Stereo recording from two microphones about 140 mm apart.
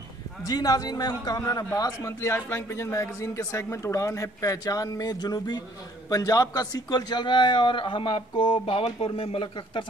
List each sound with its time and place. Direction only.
0.5 s a man's voice: 25° left (ahead or behind)